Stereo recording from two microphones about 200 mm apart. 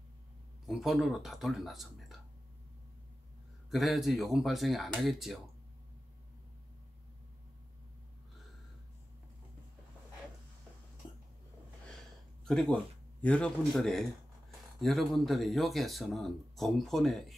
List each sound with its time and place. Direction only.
0.7 s speech: centre (ahead or behind)
3.7 s speech: centre (ahead or behind)
11.0 s a sound: 25° left (ahead or behind)
12.4 s speech: centre (ahead or behind)